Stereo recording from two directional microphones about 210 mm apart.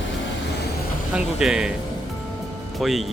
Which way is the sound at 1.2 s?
5° right (ahead or behind).